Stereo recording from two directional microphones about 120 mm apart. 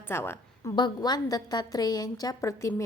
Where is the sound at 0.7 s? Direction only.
35° left (ahead or behind).